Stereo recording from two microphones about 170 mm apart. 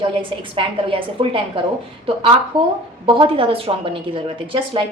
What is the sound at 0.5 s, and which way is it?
Speech, 30° right (ahead or behind).